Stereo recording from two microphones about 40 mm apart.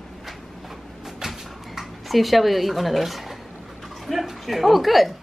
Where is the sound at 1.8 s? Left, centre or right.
Centre.